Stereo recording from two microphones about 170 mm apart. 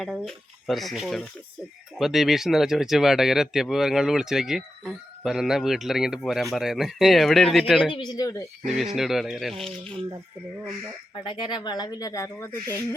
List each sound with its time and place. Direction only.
0.0 s speech: centre (ahead or behind)
7.9 s speech: 25° left (ahead or behind)
8.6 s speech: centre (ahead or behind)
11.3 s speech: 25° left (ahead or behind)